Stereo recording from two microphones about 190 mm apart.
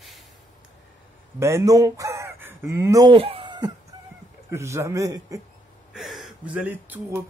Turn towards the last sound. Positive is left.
turn(degrees=-10)  # may be behind; listen again after turning